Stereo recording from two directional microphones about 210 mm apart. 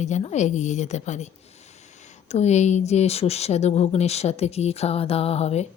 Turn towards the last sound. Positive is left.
turn(degrees=30)  # may be behind; listen again after turning